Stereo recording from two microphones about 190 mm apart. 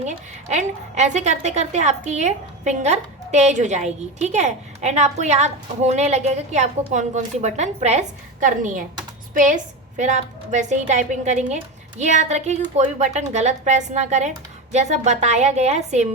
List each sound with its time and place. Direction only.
0.0 s a woman's voice: 35° right (ahead or behind)